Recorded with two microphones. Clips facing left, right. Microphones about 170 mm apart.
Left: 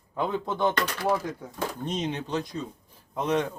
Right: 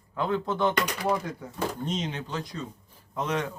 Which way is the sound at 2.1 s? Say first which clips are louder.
Left 4 dB; 20° left (ahead or behind).